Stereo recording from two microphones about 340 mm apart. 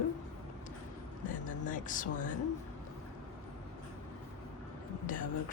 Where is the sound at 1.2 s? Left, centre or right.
Left.